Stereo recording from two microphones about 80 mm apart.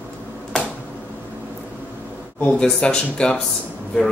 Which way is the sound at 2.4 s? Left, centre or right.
Centre.